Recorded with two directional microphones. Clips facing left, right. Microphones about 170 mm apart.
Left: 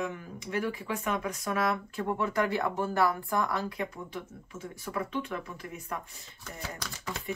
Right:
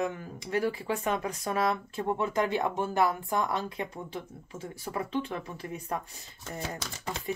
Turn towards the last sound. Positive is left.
turn(degrees=-25)  # may be behind; listen again after turning